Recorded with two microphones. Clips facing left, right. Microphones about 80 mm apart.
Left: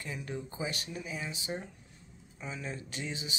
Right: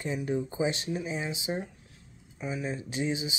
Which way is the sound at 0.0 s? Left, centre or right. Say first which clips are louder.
Right 9 dB; right.